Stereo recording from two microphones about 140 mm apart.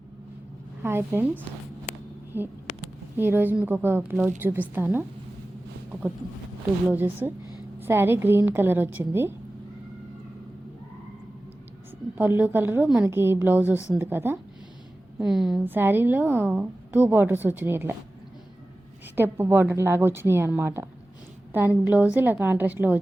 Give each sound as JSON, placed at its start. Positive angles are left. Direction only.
{"t": 0.8, "sound": "a woman's voice", "side_deg": -15}
{"t": 2.3, "sound": "a woman's voice", "side_deg": -15}
{"t": 6.9, "sound": "a woman's voice", "side_deg": -15}
{"t": 12.1, "sound": "a woman's voice", "side_deg": -15}
{"t": 15.2, "sound": "a woman's voice", "side_deg": 0}
{"t": 15.6, "sound": "a woman's voice", "side_deg": -15}
{"t": 19.1, "sound": "a woman's voice", "side_deg": -15}